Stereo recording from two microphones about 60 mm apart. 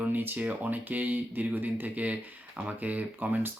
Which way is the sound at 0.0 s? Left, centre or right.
Right.